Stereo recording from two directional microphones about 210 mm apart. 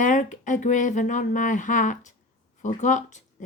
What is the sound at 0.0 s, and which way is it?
Speech, 35° left (ahead or behind).